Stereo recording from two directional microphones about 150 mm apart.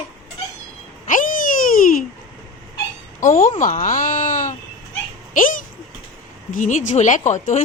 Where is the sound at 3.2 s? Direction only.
55° left (ahead or behind).